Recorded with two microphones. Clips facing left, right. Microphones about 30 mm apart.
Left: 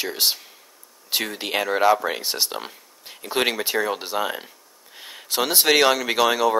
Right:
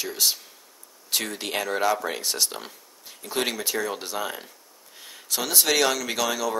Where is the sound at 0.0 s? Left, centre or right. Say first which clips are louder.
Left 3 dB; left.